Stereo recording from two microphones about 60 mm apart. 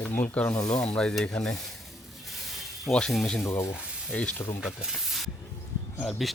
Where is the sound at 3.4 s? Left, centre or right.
Left.